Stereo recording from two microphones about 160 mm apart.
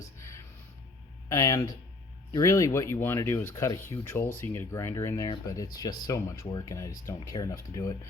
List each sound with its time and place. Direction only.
0.2 s music: 15° left (ahead or behind)
1.3 s speech: 15° left (ahead or behind)